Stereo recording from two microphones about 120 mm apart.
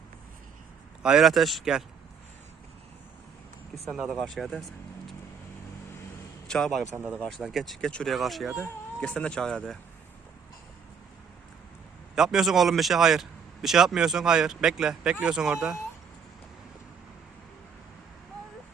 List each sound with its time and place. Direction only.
1.0 s speech: 5° right (ahead or behind)
3.8 s speech: centre (ahead or behind)
6.5 s speech: centre (ahead or behind)
6.9 s speech: 20° right (ahead or behind)
7.2 s speech: 5° left (ahead or behind)
8.6 s speech: 10° left (ahead or behind)
12.1 s speech: 5° right (ahead or behind)